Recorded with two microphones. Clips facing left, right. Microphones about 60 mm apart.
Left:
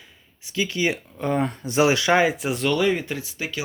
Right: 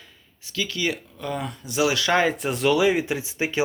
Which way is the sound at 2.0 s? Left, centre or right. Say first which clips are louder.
Left 2 dB; centre.